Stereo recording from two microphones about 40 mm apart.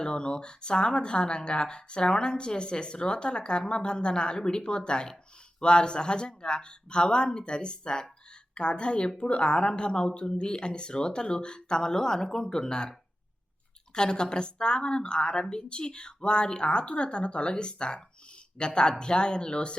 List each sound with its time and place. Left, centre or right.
0.0 s speech: left
13.9 s speech: left